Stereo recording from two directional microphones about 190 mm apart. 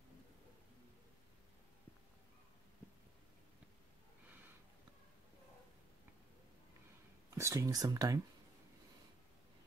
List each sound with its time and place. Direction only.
7.3 s speech: 15° right (ahead or behind)